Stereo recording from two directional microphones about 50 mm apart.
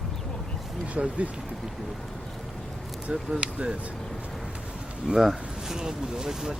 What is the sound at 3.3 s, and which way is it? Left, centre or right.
Speech, right.